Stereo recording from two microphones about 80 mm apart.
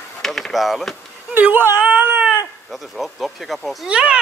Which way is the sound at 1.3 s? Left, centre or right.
Right.